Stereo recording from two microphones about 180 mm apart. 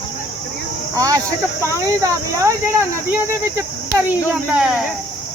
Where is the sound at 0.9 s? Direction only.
20° right (ahead or behind).